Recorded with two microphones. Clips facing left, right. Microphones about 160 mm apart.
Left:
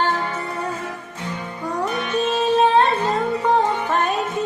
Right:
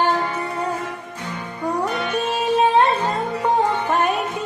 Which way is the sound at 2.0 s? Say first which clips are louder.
Left 2 dB; 10° right (ahead or behind).